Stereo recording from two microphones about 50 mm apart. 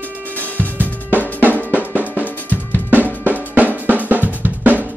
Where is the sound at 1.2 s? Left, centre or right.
Left.